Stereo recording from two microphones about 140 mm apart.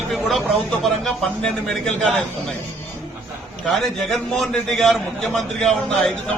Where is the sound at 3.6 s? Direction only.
Centre (ahead or behind).